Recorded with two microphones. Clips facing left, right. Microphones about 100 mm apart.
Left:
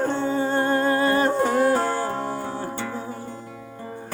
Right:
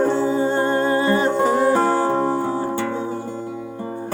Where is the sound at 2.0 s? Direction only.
35° right (ahead or behind).